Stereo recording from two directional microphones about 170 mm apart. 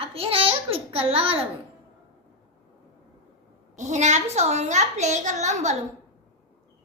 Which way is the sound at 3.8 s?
45° right (ahead or behind).